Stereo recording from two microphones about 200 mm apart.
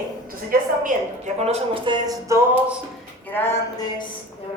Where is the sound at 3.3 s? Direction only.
10° left (ahead or behind).